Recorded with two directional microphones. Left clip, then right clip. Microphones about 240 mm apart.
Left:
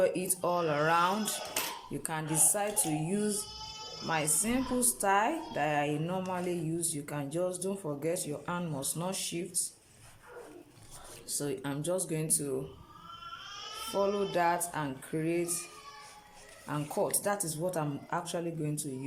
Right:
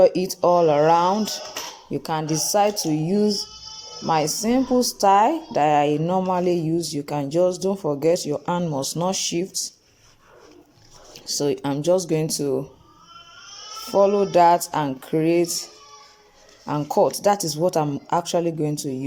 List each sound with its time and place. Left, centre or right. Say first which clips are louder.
0.0 s speech: right 13 dB; right
11.3 s speech: right 13 dB; right
13.9 s music: right 14 dB; right
16.6 s speech: right 13 dB; right